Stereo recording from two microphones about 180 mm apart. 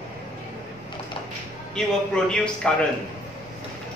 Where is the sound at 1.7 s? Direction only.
5° left (ahead or behind).